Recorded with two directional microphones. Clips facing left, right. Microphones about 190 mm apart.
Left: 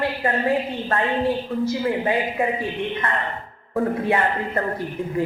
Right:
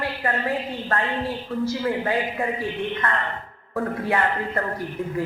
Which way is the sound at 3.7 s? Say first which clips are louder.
Left 3 dB; 20° left (ahead or behind).